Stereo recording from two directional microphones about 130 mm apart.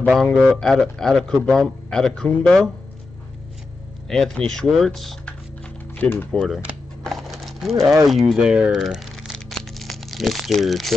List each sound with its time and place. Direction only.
0.1 s speech: centre (ahead or behind)
4.1 s speech: 5° left (ahead or behind)
5.9 s typewriter: 10° left (ahead or behind)
7.8 s speech: 25° right (ahead or behind)
8.1 s crumpling: centre (ahead or behind)